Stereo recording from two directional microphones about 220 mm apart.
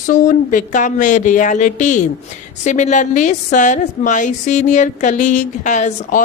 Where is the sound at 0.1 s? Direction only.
35° left (ahead or behind).